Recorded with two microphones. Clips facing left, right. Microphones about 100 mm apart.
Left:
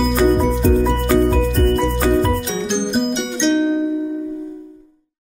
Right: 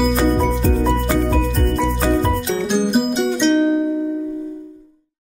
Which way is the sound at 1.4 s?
Centre (ahead or behind).